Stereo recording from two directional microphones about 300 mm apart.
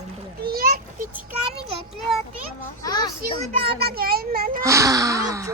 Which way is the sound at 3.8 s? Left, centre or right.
Right.